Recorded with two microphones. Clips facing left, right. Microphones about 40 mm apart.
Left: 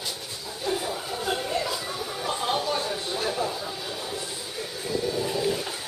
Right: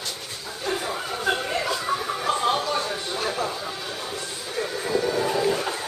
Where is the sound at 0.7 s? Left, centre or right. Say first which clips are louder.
Right 2 dB; right.